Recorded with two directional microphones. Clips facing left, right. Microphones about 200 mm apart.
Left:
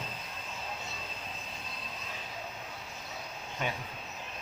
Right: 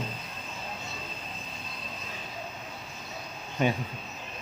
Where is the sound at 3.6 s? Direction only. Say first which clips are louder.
Right 9 dB; 20° right (ahead or behind).